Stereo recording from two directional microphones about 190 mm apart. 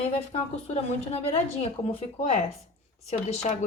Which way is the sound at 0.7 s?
35° left (ahead or behind).